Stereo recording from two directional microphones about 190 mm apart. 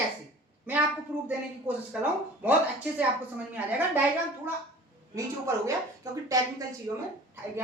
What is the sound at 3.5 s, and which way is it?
Speech, 5° right (ahead or behind).